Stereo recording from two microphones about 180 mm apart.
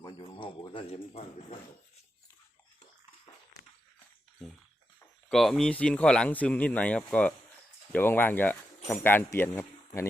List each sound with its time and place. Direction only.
0.0 s a sound: 25° left (ahead or behind)
4.4 s bathtub: centre (ahead or behind)
5.3 s speech: centre (ahead or behind)